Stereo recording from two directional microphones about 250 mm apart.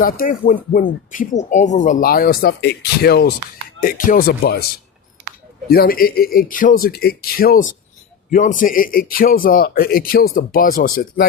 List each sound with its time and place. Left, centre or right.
0.0 s speech: left
5.6 s speech: left